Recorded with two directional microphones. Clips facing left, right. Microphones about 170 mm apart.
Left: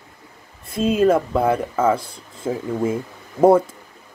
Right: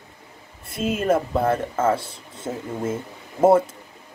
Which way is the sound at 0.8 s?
5° right (ahead or behind).